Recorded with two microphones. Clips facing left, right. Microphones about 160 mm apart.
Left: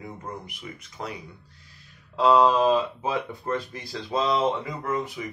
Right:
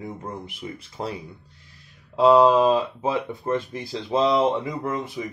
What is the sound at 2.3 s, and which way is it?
A man's voice, 15° right (ahead or behind).